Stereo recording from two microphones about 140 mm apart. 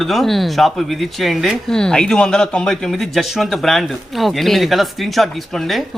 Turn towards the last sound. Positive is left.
turn(degrees=0)  # may be behind; listen again after turning